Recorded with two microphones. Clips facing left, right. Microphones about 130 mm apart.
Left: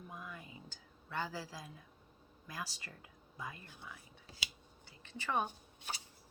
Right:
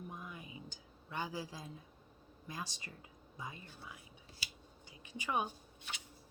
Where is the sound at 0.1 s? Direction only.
20° right (ahead or behind).